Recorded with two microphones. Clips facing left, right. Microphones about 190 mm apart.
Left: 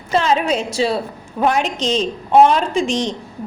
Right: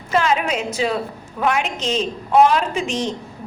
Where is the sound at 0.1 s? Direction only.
30° left (ahead or behind).